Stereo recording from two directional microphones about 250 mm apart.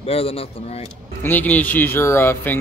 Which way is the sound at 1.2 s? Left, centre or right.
Centre.